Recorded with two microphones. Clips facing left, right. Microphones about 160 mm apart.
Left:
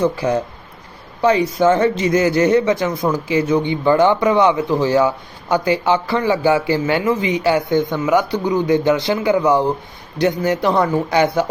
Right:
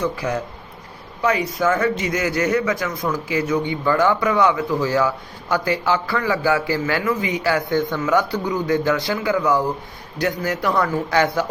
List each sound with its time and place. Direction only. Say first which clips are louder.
0.0 s speech: left 6 dB; 30° left (ahead or behind)